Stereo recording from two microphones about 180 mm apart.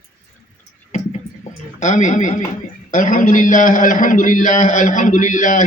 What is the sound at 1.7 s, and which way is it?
A man's voice, 40° left (ahead or behind).